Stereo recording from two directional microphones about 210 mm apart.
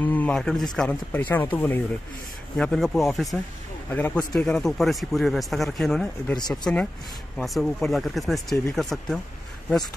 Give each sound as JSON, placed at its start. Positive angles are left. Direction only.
{"t": 0.0, "sound": "speech", "side_deg": 5}